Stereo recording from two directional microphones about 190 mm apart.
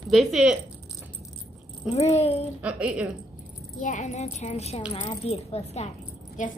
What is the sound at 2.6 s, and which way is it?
Speech, 5° right (ahead or behind).